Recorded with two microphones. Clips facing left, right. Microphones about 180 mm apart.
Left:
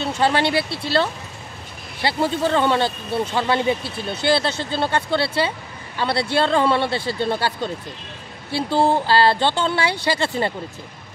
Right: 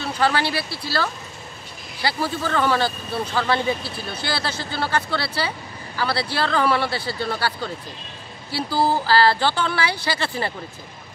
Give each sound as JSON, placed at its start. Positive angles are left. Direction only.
{"t": 0.0, "sound": "speech", "side_deg": 25}